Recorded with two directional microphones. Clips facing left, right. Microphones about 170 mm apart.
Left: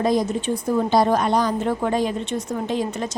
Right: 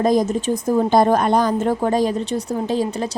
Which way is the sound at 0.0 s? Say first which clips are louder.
Right 3 dB; 45° right (ahead or behind).